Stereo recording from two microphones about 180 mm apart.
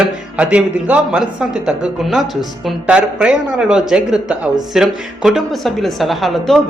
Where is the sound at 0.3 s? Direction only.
5° right (ahead or behind).